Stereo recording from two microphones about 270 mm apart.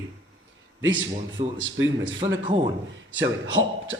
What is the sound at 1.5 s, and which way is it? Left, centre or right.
A man's voice, right.